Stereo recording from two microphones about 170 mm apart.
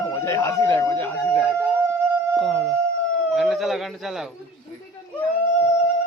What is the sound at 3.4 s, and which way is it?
Speech, centre (ahead or behind).